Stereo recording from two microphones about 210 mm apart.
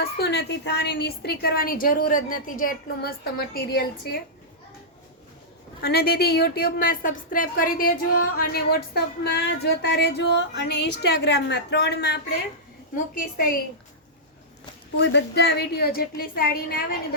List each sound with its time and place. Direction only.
0.0 s a woman's voice: 50° left (ahead or behind)
5.8 s a woman's voice: 50° left (ahead or behind)
14.9 s a woman's voice: 55° left (ahead or behind)